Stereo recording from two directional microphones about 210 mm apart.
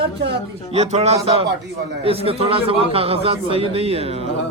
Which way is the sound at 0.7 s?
30° right (ahead or behind).